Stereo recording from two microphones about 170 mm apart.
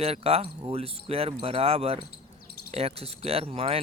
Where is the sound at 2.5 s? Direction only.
70° left (ahead or behind).